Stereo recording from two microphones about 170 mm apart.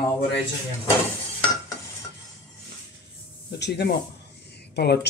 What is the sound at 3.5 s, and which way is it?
Speech, 80° left.